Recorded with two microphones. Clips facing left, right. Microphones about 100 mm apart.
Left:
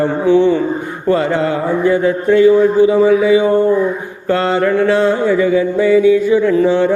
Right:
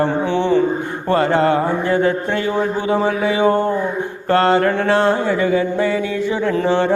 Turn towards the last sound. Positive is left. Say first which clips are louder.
# left 5 dB
turn(degrees=-55)  # may be behind; listen again after turning